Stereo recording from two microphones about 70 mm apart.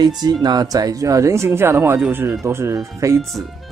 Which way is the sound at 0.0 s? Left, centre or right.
Right.